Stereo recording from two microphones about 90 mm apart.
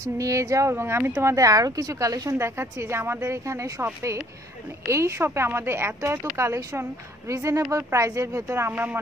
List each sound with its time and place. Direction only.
0.0 s speech: 35° right (ahead or behind)
1.2 s speech: 40° right (ahead or behind)
2.3 s speech: 25° right (ahead or behind)
8.5 s speech: 25° right (ahead or behind)